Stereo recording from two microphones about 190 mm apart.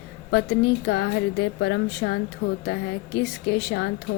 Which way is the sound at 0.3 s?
60° left (ahead or behind).